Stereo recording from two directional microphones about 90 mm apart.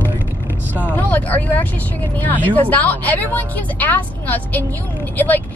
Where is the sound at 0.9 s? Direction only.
20° left (ahead or behind).